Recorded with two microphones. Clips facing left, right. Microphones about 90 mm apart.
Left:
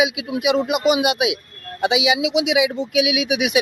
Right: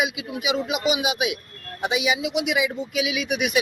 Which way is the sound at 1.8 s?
85° left.